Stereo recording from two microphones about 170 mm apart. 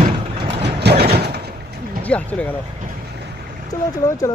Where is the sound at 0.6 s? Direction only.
80° right.